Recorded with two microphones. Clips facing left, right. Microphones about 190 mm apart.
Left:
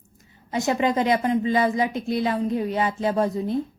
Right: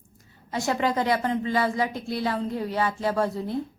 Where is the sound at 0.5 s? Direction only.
20° left (ahead or behind).